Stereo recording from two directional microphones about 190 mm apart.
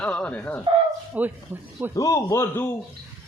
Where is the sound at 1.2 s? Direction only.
10° right (ahead or behind).